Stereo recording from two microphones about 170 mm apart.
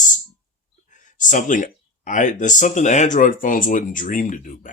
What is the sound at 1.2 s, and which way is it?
Speech, 50° left (ahead or behind).